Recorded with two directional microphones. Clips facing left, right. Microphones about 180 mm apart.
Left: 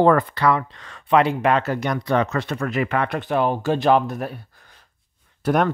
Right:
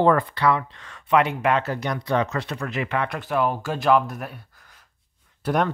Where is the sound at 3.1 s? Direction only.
25° left (ahead or behind).